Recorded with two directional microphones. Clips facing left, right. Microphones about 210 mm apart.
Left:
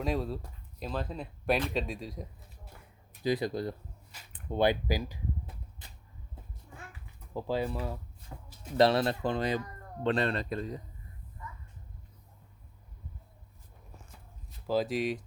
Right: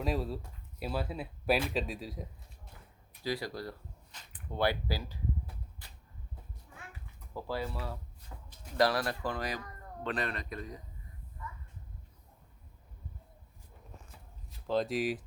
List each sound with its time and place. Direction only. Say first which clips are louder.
0.0 s speech: left 2 dB; centre (ahead or behind)
3.2 s speech: left 6 dB; 20° left (ahead or behind)
7.3 s speech: left 5 dB; 20° left (ahead or behind)
14.7 s speech: left 1 dB; centre (ahead or behind)